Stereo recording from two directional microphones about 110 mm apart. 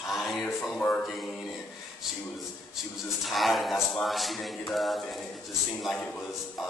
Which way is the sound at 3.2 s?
Centre (ahead or behind).